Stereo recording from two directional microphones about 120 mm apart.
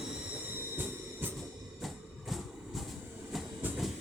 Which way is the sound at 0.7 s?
15° right (ahead or behind).